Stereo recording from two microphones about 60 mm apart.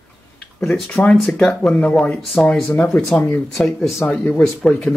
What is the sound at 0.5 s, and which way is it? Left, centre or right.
Speech, centre.